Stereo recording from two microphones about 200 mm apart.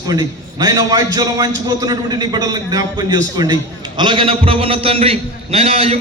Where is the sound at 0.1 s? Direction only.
20° right (ahead or behind).